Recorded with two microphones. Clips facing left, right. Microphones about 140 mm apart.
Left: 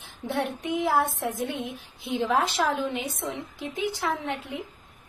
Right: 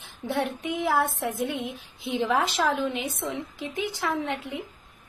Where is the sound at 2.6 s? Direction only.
10° left (ahead or behind).